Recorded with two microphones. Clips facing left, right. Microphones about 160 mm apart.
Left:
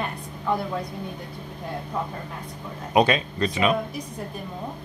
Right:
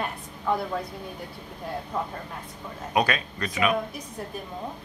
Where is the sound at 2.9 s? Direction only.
25° left (ahead or behind).